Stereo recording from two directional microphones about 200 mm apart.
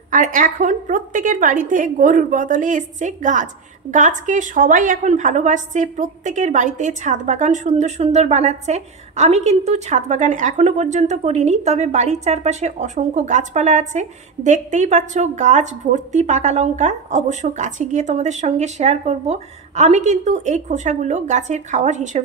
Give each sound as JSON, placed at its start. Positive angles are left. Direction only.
{"t": 0.1, "sound": "a woman's voice", "side_deg": -40}